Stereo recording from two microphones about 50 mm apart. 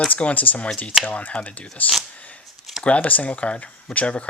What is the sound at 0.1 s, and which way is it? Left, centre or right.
Speech, left.